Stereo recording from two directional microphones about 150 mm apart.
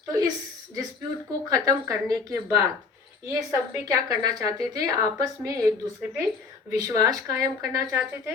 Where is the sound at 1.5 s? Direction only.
25° right (ahead or behind).